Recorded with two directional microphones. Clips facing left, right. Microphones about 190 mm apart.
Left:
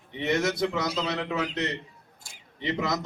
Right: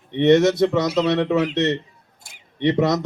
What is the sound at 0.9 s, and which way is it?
Speech, 70° right (ahead or behind).